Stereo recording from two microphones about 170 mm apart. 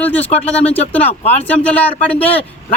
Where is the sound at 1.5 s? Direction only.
10° left (ahead or behind).